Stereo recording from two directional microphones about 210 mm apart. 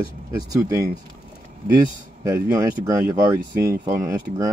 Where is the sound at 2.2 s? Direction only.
15° right (ahead or behind).